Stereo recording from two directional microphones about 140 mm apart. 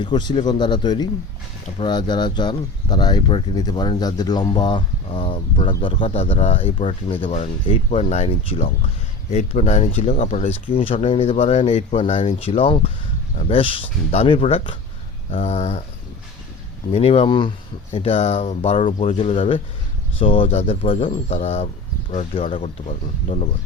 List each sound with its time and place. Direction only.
0.0 s speech: 30° left (ahead or behind); by 15.8 s 50° left (ahead or behind)
16.9 s speech: 45° left (ahead or behind)
17.9 s speech: 45° left (ahead or behind)